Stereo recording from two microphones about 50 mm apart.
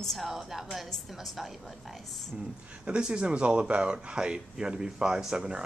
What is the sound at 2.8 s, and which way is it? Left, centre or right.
Speech, centre.